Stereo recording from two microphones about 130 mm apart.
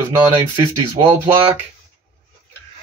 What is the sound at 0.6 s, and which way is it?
Speech, 30° right (ahead or behind).